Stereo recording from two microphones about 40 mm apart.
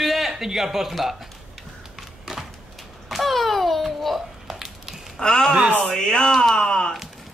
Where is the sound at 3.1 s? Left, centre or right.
Centre.